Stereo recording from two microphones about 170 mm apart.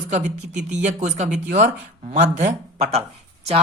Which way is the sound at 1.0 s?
40° right (ahead or behind).